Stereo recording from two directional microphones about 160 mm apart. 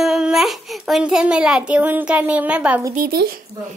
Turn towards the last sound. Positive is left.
turn(degrees=-70)  # may be behind; listen again after turning